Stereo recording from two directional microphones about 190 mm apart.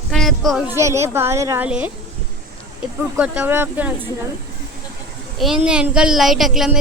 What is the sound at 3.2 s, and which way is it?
Speech, 10° right (ahead or behind).